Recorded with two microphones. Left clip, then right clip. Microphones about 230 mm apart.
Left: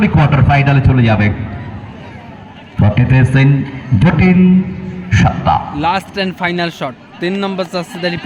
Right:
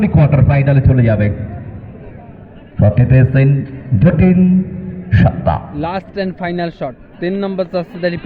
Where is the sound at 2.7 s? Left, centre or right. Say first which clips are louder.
Even; left.